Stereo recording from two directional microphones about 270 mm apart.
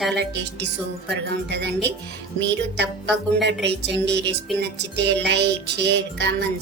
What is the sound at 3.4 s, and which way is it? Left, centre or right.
Music, right.